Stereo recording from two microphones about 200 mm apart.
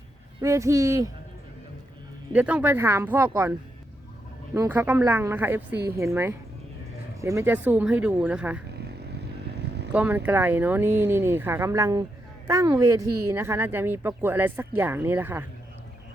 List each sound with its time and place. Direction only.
0.4 s speech: 15° right (ahead or behind)
2.3 s speech: 5° right (ahead or behind)
4.5 s speech: 15° right (ahead or behind)
9.6 s vehicle: 55° right (ahead or behind)
9.9 s speech: 10° right (ahead or behind)